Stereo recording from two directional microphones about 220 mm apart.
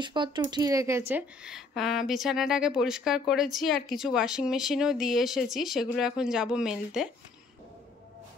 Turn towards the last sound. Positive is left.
turn(degrees=-5)  # may be behind; listen again after turning